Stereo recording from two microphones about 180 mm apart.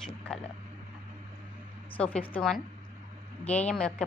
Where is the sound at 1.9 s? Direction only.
10° left (ahead or behind).